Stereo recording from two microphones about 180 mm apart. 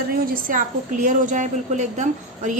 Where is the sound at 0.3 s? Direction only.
50° right (ahead or behind).